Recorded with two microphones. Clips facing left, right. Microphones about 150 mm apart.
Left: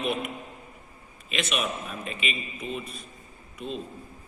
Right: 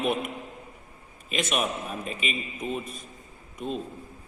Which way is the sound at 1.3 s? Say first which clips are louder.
Right 2 dB; 45° right (ahead or behind).